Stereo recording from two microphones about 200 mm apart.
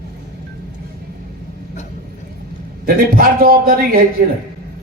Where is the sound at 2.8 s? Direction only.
45° right (ahead or behind).